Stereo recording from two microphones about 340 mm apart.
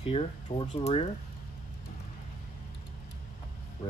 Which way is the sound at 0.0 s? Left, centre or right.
Centre.